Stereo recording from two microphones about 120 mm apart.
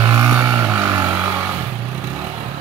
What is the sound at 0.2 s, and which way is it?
Vehicle, 15° right (ahead or behind).